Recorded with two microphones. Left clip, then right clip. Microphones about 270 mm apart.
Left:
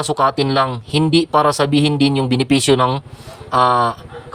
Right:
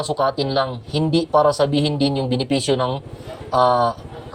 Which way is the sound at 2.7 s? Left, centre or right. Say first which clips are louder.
Left 6 dB; left.